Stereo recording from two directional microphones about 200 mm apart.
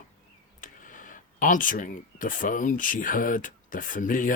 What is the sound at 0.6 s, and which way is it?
Speech, 40° left (ahead or behind).